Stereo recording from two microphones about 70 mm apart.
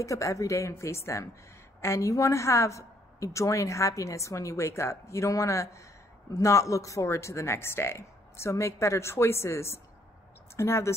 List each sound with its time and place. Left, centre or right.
0.0 s a woman's voice: left